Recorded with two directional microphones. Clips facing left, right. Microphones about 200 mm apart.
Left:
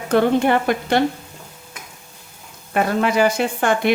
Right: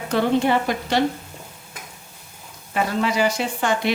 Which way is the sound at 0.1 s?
55° left (ahead or behind).